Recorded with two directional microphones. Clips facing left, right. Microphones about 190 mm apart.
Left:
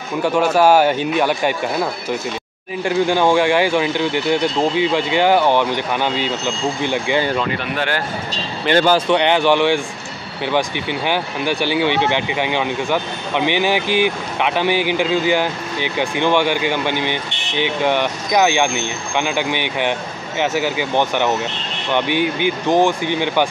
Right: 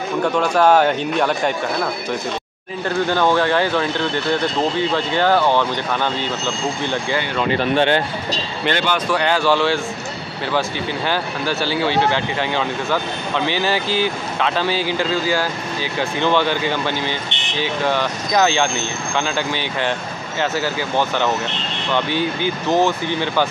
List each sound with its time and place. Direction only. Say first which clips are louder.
0.2 s speech: left 2 dB; 5° left (ahead or behind)
2.8 s speech: left 2 dB; 10° left (ahead or behind)
7.5 s speech: right 6 dB; 25° right (ahead or behind)
8.7 s speech: left 9 dB; 40° left (ahead or behind)
9.1 s speech: left 3 dB; 20° left (ahead or behind)